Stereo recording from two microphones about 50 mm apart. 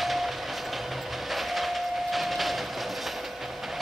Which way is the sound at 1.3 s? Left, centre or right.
Centre.